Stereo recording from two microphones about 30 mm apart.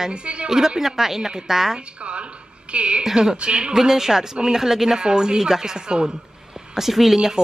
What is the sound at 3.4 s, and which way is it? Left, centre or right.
Speech, right.